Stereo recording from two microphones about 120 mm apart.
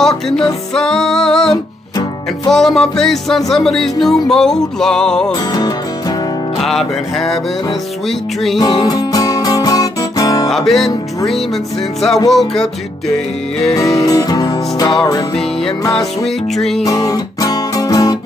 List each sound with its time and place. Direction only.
0.0 s music: 5° left (ahead or behind)
5.5 s music: 35° left (ahead or behind)
6.6 s music: centre (ahead or behind)
8.5 s music: 40° left (ahead or behind)
10.5 s music: centre (ahead or behind)
12.3 s music: centre (ahead or behind)
13.7 s music: 30° left (ahead or behind)
16.5 s music: centre (ahead or behind)
16.8 s music: 30° left (ahead or behind)